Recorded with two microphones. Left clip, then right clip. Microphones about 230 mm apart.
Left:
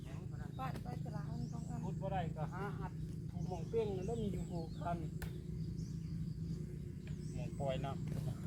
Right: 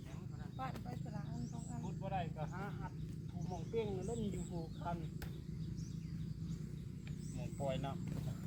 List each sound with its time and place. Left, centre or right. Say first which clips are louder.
2.0 s a sound: left 1 dB; centre
3.8 s speech: left 2 dB; centre
7.6 s speech: left 1 dB; centre